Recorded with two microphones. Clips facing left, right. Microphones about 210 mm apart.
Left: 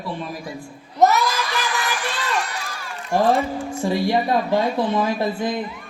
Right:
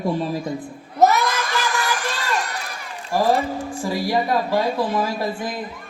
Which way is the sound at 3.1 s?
25° left (ahead or behind).